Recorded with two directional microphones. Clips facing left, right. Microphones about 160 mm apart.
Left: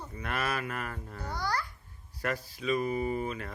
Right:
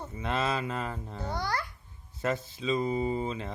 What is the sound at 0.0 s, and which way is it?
Speech, 25° right (ahead or behind).